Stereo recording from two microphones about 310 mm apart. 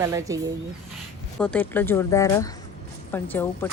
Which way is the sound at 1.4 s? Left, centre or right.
Centre.